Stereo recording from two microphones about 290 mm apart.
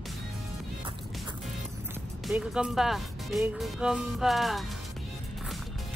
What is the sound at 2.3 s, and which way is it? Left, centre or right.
Speech, centre.